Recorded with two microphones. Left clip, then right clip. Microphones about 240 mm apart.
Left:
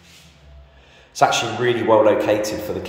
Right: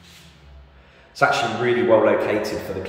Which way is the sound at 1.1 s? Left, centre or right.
Left.